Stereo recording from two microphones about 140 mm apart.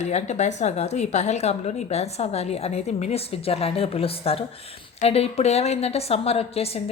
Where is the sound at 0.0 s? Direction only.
55° left (ahead or behind).